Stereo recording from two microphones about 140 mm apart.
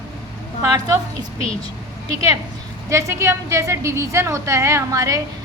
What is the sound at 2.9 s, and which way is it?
A woman's voice, 20° right (ahead or behind).